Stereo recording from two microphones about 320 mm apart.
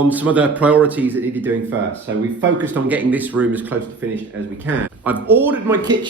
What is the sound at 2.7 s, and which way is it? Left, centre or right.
Speech, centre.